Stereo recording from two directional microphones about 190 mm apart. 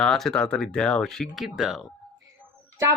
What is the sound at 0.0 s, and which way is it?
Speech, centre (ahead or behind).